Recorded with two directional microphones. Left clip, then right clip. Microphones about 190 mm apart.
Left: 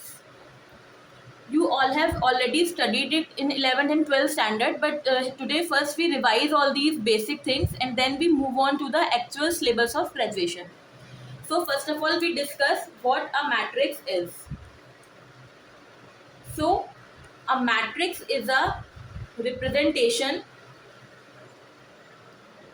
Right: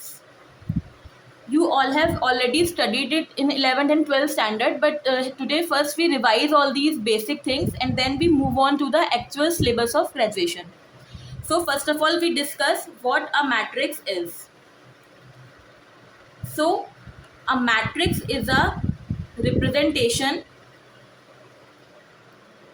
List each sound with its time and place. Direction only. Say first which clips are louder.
1.5 s a woman's voice: right 3 dB; 30° right (ahead or behind)
11.4 s a woman's voice: right 4 dB; 35° right (ahead or behind)
17.4 s a woman's voice: right 3 dB; 35° right (ahead or behind)